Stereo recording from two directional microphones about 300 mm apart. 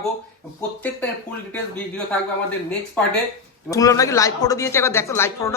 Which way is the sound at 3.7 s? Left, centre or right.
Centre.